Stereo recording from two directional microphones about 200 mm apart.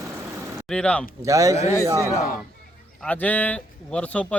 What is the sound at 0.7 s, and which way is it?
Speech, 5° left (ahead or behind).